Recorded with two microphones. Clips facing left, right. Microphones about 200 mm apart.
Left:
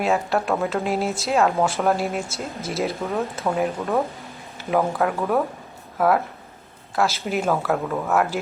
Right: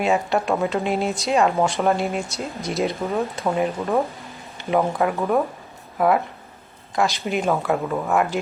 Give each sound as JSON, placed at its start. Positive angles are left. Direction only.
{"t": 0.0, "sound": "speech", "side_deg": 0}